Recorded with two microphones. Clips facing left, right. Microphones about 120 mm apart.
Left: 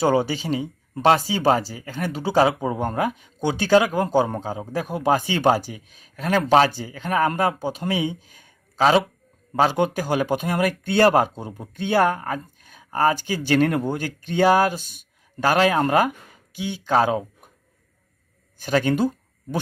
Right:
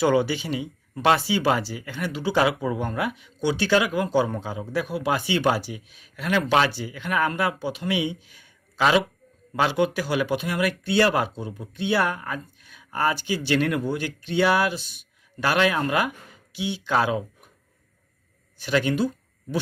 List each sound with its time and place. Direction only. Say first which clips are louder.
0.0 s speech: left 1 dB; 40° left (ahead or behind)
18.6 s speech: left 2 dB; 45° left (ahead or behind)